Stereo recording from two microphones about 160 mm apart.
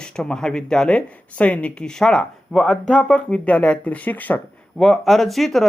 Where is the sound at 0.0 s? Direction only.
5° left (ahead or behind).